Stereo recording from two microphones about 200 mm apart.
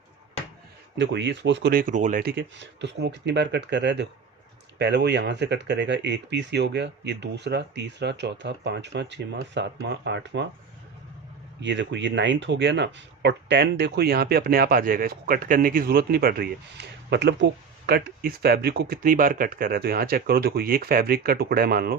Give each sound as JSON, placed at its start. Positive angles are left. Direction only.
{"t": 0.9, "sound": "speech", "side_deg": -60}
{"t": 1.8, "sound": "speech", "side_deg": -40}
{"t": 11.6, "sound": "speech", "side_deg": -60}